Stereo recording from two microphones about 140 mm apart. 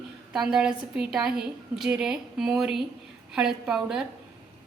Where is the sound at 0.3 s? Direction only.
5° right (ahead or behind).